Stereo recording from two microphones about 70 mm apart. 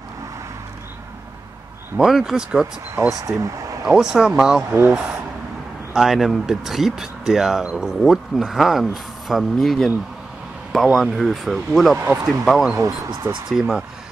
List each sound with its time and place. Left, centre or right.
2.0 s speech: centre
3.1 s speech: right
3.3 s speech: right
3.8 s speech: centre
4.6 s speech: right
5.9 s speech: centre
12.7 s speech: right
13.5 s speech: centre